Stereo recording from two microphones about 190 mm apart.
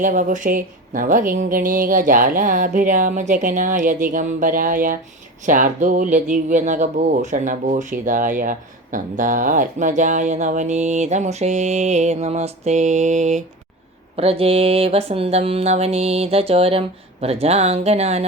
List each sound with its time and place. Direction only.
0.0 s speech: 45° right (ahead or behind)